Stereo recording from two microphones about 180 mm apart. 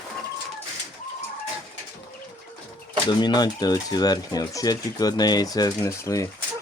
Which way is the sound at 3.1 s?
25° left (ahead or behind).